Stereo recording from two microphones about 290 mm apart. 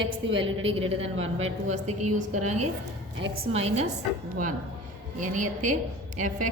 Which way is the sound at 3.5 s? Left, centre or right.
Right.